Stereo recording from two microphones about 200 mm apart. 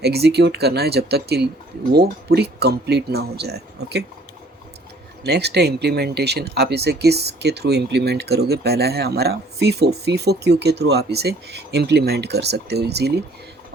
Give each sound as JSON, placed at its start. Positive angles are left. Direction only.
{"t": 0.0, "sound": "speech", "side_deg": -55}
{"t": 5.2, "sound": "speech", "side_deg": -55}